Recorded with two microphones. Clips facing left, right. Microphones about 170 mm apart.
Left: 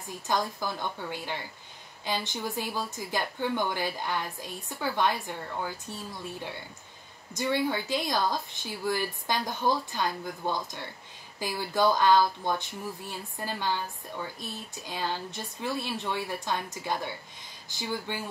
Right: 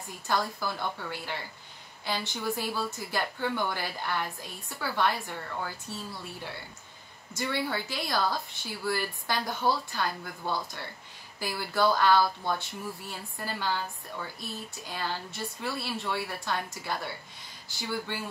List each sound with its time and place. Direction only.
0.3 s speech: 15° left (ahead or behind)
7.3 s speech: 20° left (ahead or behind)